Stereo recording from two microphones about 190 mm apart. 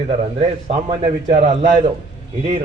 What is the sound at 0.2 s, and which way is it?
A man's voice, 35° right (ahead or behind).